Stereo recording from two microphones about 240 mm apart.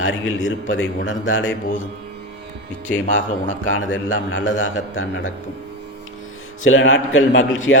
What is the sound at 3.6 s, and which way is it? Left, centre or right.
A man's voice, left.